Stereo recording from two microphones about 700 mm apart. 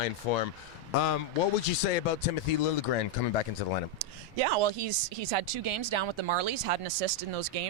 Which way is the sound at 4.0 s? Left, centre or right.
Right.